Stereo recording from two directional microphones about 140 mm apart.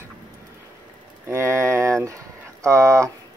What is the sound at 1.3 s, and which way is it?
Speech, 20° right (ahead or behind).